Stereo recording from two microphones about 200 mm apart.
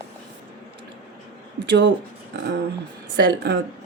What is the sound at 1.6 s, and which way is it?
Speech, 60° right (ahead or behind).